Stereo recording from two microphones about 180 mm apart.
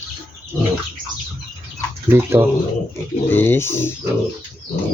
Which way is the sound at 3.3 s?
10° left (ahead or behind).